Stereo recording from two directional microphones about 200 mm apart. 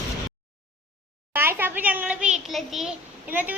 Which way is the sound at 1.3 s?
10° right (ahead or behind).